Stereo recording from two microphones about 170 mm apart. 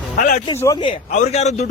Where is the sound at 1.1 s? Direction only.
45° left (ahead or behind).